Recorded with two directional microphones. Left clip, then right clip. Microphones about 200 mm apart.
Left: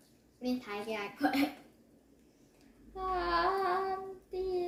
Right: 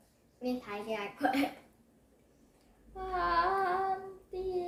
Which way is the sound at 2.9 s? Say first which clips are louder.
Right 1 dB; 5° left (ahead or behind).